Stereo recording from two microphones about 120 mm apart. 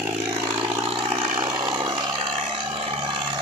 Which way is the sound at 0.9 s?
50° right (ahead or behind).